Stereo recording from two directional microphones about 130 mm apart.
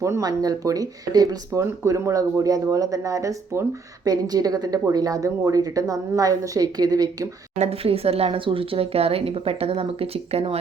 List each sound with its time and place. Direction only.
0.0 s speech: 25° right (ahead or behind)
7.6 s speech: 50° right (ahead or behind)